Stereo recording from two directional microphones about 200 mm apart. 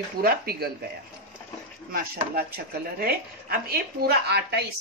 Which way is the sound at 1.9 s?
45° right (ahead or behind).